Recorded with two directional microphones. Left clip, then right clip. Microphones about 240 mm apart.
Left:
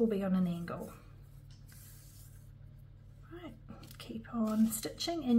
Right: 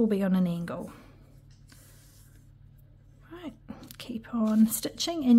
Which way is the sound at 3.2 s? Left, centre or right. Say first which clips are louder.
Right 7 dB; right.